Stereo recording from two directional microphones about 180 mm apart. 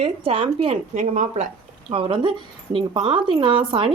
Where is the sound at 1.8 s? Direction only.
30° right (ahead or behind).